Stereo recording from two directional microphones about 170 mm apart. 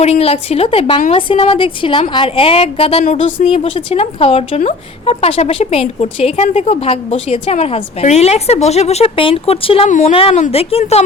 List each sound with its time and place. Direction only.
0.0 s a woman's voice: 35° left (ahead or behind)
3.0 s a woman's voice: 45° left (ahead or behind)